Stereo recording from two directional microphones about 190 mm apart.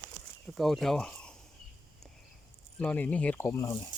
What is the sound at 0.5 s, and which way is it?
Speech, centre (ahead or behind).